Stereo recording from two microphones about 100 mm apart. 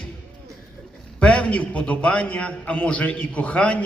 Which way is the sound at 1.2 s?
10° left (ahead or behind).